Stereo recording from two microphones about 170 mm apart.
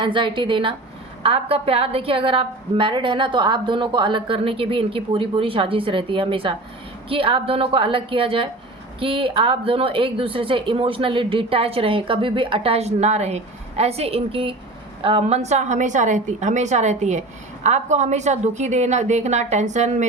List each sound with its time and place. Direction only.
0.0 s a woman's voice: 30° right (ahead or behind)